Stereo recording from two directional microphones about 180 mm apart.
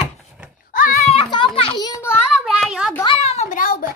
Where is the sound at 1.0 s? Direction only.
30° left (ahead or behind).